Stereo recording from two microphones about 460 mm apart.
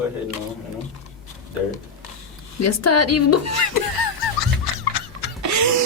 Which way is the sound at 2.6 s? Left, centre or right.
Left.